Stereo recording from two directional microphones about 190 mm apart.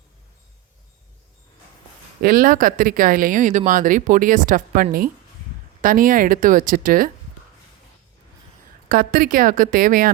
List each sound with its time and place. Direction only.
2.2 s speech: 50° right (ahead or behind)
8.9 s speech: 50° right (ahead or behind)